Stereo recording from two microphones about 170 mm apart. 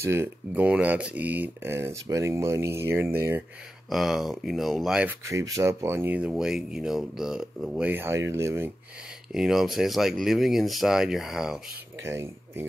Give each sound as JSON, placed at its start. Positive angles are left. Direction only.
{"t": 0.0, "sound": "speech", "side_deg": -15}
{"t": 3.9, "sound": "speech", "side_deg": 0}
{"t": 5.2, "sound": "speech", "side_deg": -20}
{"t": 9.3, "sound": "speech", "side_deg": 0}
{"t": 12.0, "sound": "speech", "side_deg": -15}